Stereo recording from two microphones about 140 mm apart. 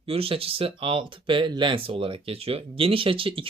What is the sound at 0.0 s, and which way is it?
Speech, 45° right (ahead or behind).